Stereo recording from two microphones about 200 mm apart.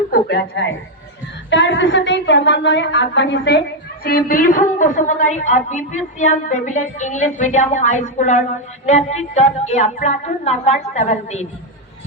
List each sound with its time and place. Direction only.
0.1 s a woman's voice: 55° left (ahead or behind)
4.0 s a woman's voice: 45° left (ahead or behind)